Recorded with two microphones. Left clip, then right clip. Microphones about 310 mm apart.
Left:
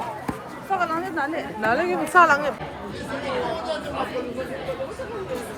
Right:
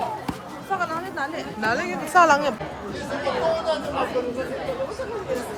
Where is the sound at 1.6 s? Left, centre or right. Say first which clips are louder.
Left 3 dB; centre.